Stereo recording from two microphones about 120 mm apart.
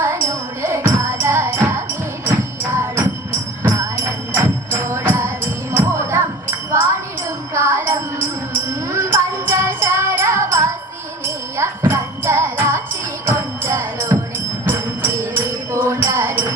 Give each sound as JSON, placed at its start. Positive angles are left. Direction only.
{"t": 0.0, "sound": "music", "side_deg": -25}
{"t": 7.5, "sound": "music", "side_deg": -20}